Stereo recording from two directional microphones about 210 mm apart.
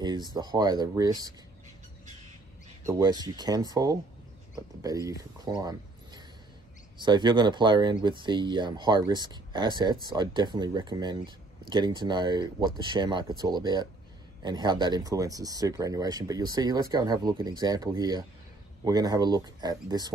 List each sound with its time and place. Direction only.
0.3 s speech: 20° right (ahead or behind)
2.9 s speech: 20° right (ahead or behind)